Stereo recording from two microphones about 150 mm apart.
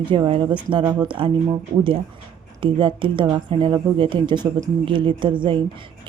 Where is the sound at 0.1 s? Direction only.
35° right (ahead or behind).